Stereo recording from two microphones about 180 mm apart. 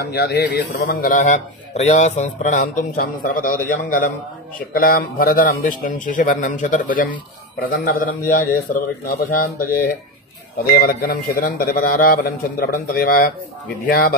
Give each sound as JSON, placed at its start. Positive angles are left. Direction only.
{"t": 0.0, "sound": "a man's voice", "side_deg": 65}
{"t": 10.7, "sound": "a man's voice", "side_deg": 50}